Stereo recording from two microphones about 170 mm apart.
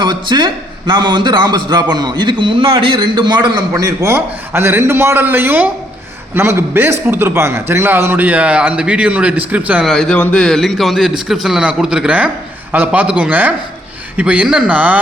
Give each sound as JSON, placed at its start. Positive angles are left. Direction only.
{"t": 0.0, "sound": "a man's voice", "side_deg": -25}
{"t": 9.9, "sound": "a man's voice", "side_deg": 5}